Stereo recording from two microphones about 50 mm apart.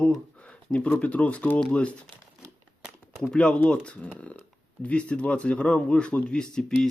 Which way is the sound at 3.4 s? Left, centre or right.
Left.